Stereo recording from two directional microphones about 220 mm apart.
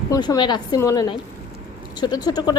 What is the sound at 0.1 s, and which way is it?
A woman's voice, 20° left (ahead or behind).